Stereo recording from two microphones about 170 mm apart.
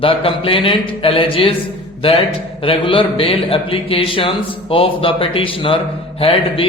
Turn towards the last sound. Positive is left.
turn(degrees=35)  # may be behind; listen again after turning